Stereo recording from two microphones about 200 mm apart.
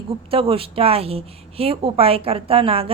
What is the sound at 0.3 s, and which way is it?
A woman's voice, 30° right (ahead or behind).